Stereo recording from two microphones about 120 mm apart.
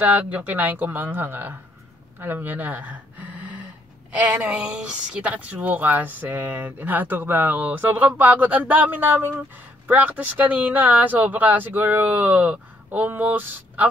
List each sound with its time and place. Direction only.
0.0 s speech: 15° right (ahead or behind)